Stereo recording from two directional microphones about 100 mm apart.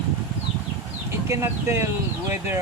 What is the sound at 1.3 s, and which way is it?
Speech, 25° right (ahead or behind).